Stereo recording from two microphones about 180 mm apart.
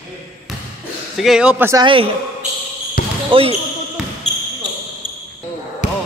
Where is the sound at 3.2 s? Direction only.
30° right (ahead or behind).